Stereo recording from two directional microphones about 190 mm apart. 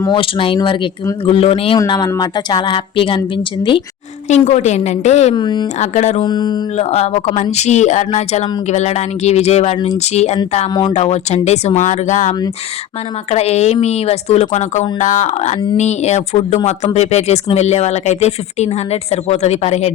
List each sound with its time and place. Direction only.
0.0 s a woman's voice: 25° left (ahead or behind)
1.8 s a woman's voice: 20° left (ahead or behind)
4.3 s speech: 35° left (ahead or behind)
5.4 s a woman's voice: 25° left (ahead or behind)
5.8 s speech: 35° left (ahead or behind)
6.2 s a woman's voice: 20° left (ahead or behind)
6.7 s speech: 35° left (ahead or behind)
13.3 s speech: 35° left (ahead or behind)